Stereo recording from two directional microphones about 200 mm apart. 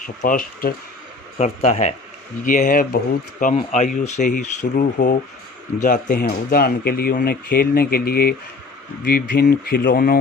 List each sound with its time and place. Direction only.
0.2 s speech: 45° left (ahead or behind)